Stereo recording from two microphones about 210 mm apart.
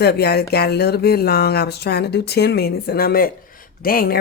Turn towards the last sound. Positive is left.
turn(degrees=45)  # may be behind; listen again after turning